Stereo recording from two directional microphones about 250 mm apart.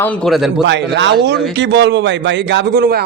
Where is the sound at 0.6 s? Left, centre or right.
Right.